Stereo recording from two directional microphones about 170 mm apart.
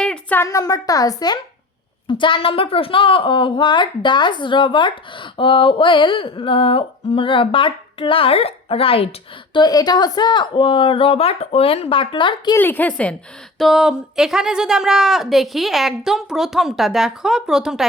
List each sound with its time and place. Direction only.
0.0 s a woman's voice: 5° left (ahead or behind); by 12.5 s 30° left (ahead or behind)
12.5 s a woman's voice: 10° left (ahead or behind)
13.6 s speech: centre (ahead or behind)